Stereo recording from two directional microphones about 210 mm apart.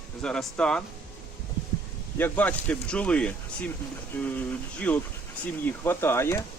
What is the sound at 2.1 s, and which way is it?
Speech, 10° left (ahead or behind).